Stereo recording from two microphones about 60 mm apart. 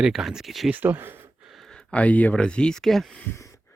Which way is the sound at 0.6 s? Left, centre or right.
Right.